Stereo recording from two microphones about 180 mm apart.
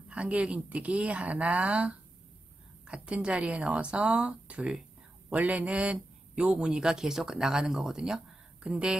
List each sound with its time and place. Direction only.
0.1 s a man's voice: 5° right (ahead or behind)